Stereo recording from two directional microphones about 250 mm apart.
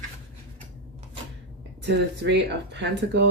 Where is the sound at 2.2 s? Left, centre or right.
Right.